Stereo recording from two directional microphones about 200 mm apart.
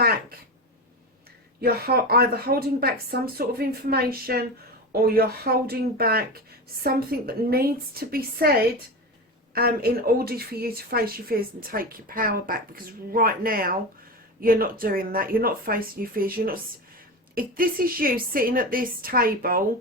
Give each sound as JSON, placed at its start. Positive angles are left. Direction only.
{"t": 1.6, "sound": "speech", "side_deg": -50}
{"t": 9.6, "sound": "speech", "side_deg": -50}